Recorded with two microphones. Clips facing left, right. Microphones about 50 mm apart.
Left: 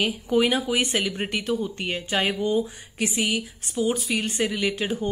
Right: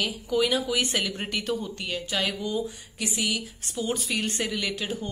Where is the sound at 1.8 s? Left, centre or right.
Left.